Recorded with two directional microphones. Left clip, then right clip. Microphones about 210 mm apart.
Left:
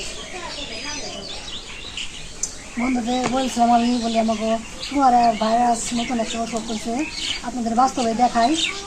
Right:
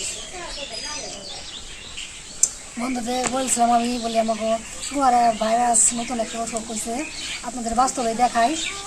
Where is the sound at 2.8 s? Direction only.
25° right (ahead or behind).